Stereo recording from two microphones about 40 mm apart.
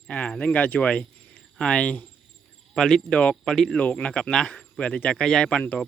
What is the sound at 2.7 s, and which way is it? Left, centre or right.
Speech, centre.